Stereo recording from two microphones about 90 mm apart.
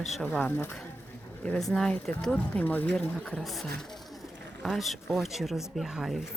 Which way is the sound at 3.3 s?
5° left (ahead or behind).